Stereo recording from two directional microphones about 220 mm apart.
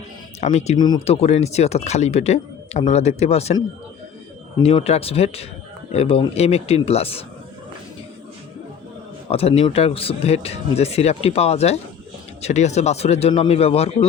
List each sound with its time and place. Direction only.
0.3 s speech: 30° left (ahead or behind)
4.6 s speech: 25° left (ahead or behind)
9.3 s speech: 25° left (ahead or behind)